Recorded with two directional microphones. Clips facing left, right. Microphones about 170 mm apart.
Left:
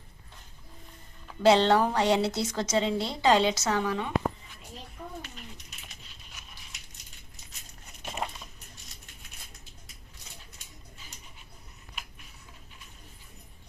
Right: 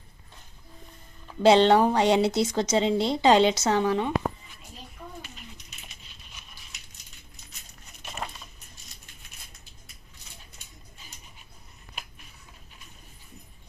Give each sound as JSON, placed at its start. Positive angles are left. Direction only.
{"t": 1.4, "sound": "a woman's voice", "side_deg": -20}